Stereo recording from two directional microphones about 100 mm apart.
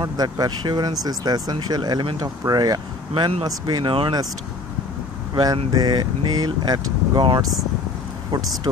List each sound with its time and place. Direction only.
0.0 s speech: 40° right (ahead or behind)
3.8 s speech: 60° right (ahead or behind)
5.3 s speech: 40° right (ahead or behind)
8.3 s speech: 40° right (ahead or behind)